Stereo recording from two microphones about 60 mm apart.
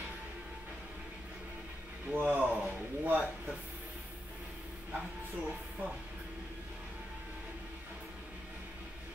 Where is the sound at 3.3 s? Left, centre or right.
Centre.